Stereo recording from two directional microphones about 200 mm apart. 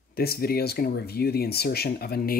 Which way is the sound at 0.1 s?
50° left (ahead or behind).